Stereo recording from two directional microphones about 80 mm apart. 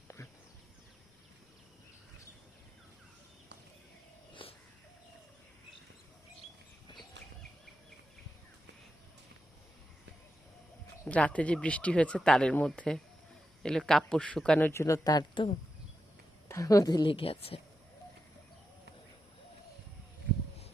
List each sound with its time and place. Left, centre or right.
4.4 s bird: left
11.1 s speech: centre
14.7 s speech: left
15.0 s speech: left
16.5 s a woman's voice: left